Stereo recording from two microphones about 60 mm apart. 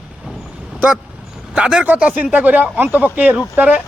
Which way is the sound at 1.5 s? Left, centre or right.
Centre.